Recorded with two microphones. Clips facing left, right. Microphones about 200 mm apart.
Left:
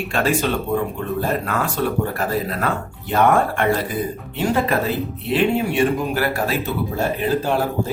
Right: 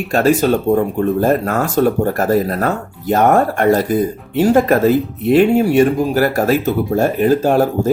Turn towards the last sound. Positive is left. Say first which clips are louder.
# right 7 dB
turn(degrees=-45)  # may be behind; listen again after turning